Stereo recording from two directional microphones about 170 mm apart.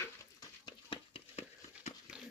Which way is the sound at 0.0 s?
20° left (ahead or behind).